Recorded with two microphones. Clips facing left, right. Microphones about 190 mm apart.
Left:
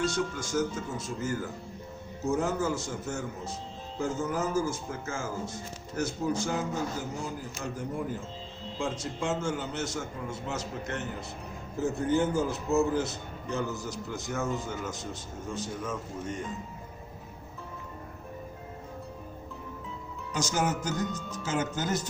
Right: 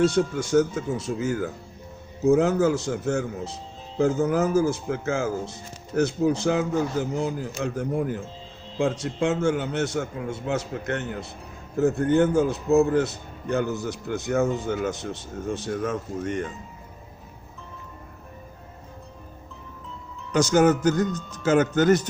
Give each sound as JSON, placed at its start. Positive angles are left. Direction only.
{"t": 0.0, "sound": "a man's voice", "side_deg": -65}
{"t": 20.3, "sound": "speech", "side_deg": -70}